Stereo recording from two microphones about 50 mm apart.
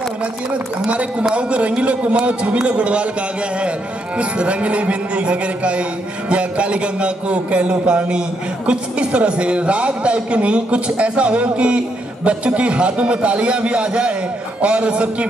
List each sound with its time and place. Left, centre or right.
0.5 s a man's voice: right
4.2 s a man's voice: right